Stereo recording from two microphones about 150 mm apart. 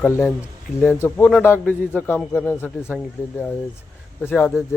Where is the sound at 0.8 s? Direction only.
15° left (ahead or behind).